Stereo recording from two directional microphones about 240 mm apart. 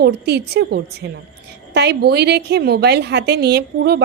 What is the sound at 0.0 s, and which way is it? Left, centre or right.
A woman's voice, right.